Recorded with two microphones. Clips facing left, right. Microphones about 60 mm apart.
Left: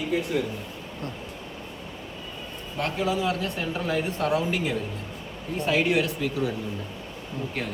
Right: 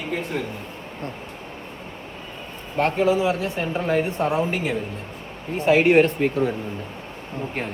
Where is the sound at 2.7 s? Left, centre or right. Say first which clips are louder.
Right 7 dB; right.